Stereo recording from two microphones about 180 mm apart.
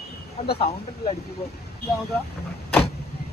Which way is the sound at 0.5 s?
35° left (ahead or behind).